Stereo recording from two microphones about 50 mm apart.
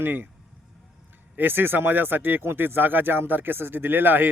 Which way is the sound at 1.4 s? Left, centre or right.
Right.